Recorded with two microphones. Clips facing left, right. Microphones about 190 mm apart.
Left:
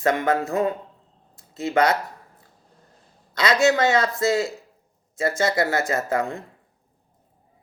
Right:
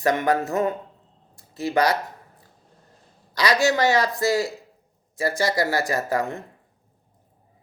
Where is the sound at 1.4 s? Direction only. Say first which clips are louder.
Left 1 dB; 35° right (ahead or behind).